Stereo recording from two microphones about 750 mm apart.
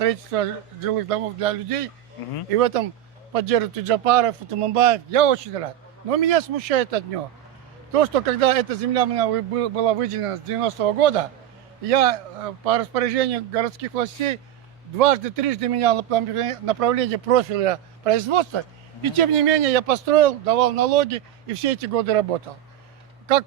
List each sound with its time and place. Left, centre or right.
0.0 s speech: right